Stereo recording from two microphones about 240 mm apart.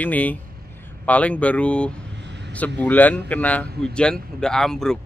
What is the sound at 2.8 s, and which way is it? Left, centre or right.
A man's voice, centre.